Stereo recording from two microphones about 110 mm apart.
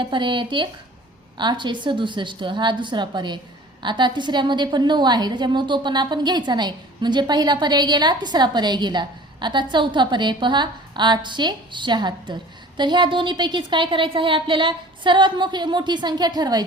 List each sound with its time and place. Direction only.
0.0 s a woman's voice: 45° right (ahead or behind)